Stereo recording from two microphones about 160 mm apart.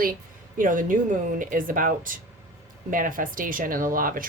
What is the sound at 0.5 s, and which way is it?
Speech, 55° right (ahead or behind).